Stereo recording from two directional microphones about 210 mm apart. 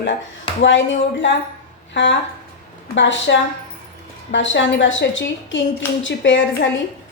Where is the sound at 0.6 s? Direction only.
60° left (ahead or behind).